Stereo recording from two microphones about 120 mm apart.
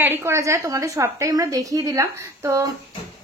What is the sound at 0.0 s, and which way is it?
A woman's voice, 20° right (ahead or behind).